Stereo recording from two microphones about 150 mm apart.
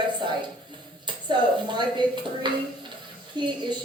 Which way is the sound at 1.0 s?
30° right (ahead or behind).